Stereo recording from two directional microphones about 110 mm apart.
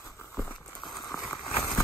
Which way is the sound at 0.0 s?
25° left (ahead or behind).